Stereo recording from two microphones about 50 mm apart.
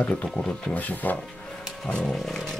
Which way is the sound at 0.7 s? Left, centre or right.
Left.